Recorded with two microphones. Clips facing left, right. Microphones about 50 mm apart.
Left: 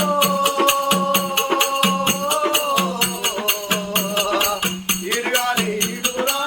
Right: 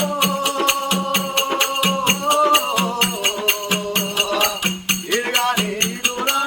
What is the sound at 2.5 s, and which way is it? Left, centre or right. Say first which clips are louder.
Music: right 2 dB; right.